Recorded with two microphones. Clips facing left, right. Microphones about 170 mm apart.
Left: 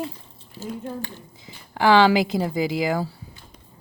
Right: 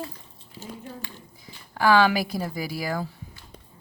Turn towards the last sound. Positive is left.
turn(degrees=20)  # may be behind; listen again after turning